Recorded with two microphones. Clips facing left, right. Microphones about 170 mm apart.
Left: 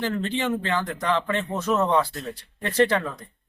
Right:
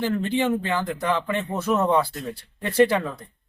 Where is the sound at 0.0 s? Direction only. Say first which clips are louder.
Right 3 dB; 10° right (ahead or behind).